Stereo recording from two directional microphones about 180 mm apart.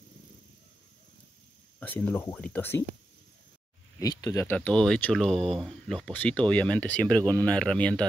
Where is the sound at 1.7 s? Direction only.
10° left (ahead or behind).